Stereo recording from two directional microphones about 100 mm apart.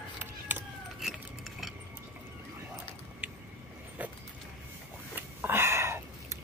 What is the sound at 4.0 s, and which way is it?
Vehicle, 15° right (ahead or behind).